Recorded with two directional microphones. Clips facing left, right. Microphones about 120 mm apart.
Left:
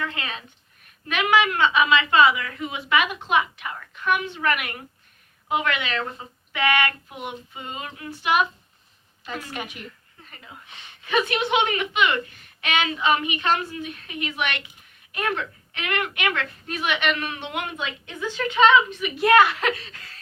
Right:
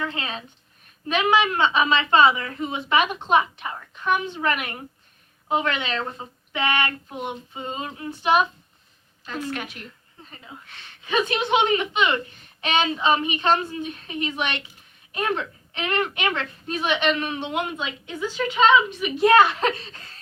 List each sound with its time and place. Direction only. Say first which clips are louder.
0.0 s a woman's voice: right 1 dB; 25° right (ahead or behind)
9.2 s a woman's voice: right 3 dB; 10° left (ahead or behind)
10.2 s a woman's voice: right 1 dB; 25° right (ahead or behind)